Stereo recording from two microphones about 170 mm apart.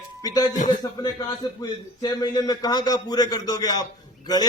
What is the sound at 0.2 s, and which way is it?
A man's voice, 20° left (ahead or behind).